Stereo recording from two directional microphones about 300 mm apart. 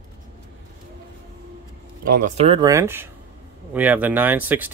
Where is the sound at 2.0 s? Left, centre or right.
Right.